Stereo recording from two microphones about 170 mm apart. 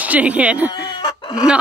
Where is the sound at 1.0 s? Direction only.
25° left (ahead or behind).